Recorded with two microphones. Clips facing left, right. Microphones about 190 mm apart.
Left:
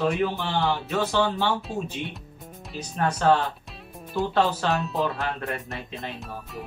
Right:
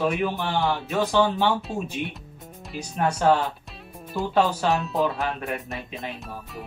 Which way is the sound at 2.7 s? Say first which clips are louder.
Right 1 dB; 10° right (ahead or behind).